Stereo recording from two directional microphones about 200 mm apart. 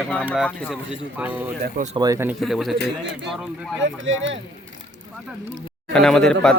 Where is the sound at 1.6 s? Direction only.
40° right (ahead or behind).